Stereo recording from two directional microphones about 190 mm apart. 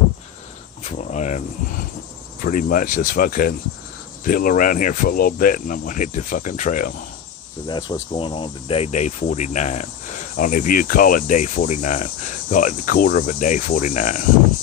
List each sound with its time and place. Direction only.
0.9 s cricket: 40° left (ahead or behind)
2.4 s cricket: 45° left (ahead or behind)
7.6 s cricket: 25° left (ahead or behind); by 14.2 s 40° left (ahead or behind)